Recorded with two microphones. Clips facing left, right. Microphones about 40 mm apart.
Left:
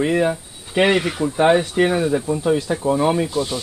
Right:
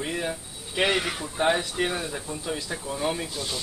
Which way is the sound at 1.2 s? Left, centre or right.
Left.